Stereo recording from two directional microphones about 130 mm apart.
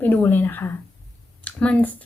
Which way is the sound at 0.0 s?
15° left (ahead or behind).